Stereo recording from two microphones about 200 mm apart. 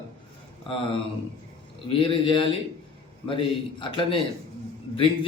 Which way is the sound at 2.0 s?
25° left (ahead or behind).